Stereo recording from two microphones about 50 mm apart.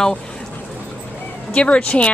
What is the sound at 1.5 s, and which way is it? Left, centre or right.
Speech, left.